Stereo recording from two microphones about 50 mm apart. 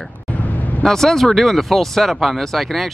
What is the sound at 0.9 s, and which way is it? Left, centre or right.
Speech, centre.